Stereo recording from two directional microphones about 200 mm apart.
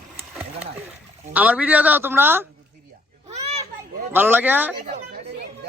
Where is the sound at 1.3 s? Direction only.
5° right (ahead or behind).